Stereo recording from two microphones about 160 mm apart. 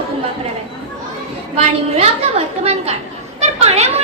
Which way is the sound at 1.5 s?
40° right (ahead or behind).